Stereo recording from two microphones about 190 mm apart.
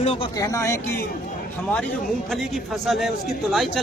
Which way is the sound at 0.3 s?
15° left (ahead or behind).